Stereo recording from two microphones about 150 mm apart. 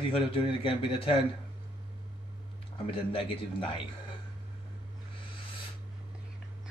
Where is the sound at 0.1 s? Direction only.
35° left (ahead or behind).